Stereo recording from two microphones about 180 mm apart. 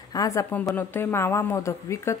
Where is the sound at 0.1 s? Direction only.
20° left (ahead or behind).